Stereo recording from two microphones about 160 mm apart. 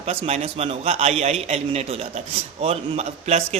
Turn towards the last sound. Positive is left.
turn(degrees=-40)  # may be behind; listen again after turning